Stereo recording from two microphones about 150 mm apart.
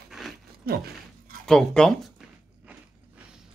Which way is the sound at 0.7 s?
90° right.